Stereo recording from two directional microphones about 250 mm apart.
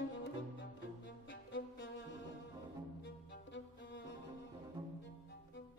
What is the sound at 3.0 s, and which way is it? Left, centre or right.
Music, left.